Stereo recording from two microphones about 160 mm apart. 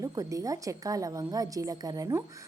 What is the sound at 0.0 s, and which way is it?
A woman's voice, 20° right (ahead or behind).